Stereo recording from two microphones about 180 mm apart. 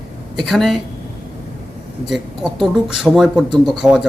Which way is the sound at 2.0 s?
Centre (ahead or behind).